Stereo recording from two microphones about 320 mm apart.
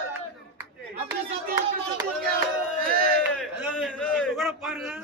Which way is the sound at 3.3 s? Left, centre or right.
Centre.